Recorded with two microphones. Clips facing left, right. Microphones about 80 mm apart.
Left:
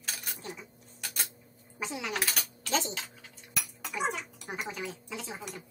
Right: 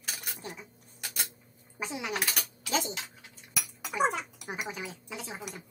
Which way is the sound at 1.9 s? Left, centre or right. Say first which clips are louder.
Even; centre.